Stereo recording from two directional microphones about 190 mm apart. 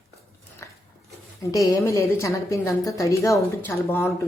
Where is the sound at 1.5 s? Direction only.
15° left (ahead or behind).